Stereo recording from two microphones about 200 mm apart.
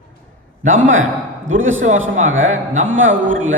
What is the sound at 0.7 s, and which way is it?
A man's voice, 75° right (ahead or behind).